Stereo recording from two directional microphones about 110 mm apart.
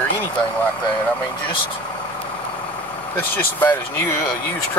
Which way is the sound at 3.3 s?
20° left (ahead or behind).